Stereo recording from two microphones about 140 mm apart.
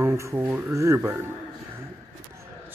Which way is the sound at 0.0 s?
20° right (ahead or behind).